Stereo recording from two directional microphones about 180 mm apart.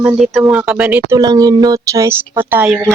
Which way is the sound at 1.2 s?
20° right (ahead or behind).